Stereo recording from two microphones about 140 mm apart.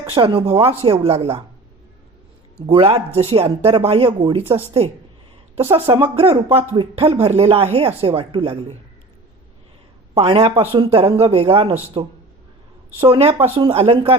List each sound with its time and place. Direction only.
0.1 s speech: 40° right (ahead or behind)
2.6 s speech: 40° right (ahead or behind)
5.7 s speech: 40° right (ahead or behind)
10.2 s speech: 45° right (ahead or behind)